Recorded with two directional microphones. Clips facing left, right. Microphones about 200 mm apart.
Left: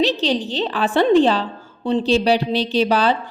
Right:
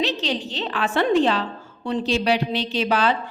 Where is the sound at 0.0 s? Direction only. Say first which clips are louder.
Left 6 dB; 35° left (ahead or behind).